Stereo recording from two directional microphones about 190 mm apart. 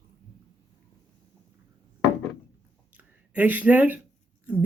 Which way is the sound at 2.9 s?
10° right (ahead or behind).